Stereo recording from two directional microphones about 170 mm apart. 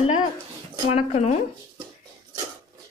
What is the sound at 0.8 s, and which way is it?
Speech, 40° left (ahead or behind).